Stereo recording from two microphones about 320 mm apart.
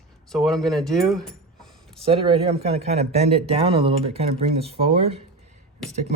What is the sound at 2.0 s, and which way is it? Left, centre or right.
Speech, centre.